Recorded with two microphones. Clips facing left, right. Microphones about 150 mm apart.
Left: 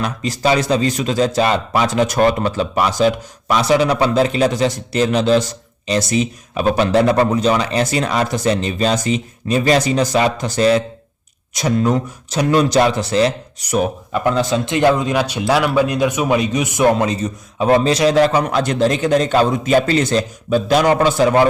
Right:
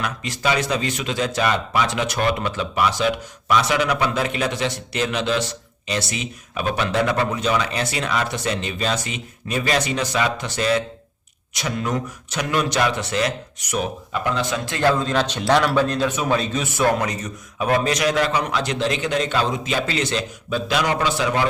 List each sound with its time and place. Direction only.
0.0 s a man's voice: 35° left (ahead or behind)
14.6 s speech: 20° left (ahead or behind); by 21.4 s 45° left (ahead or behind)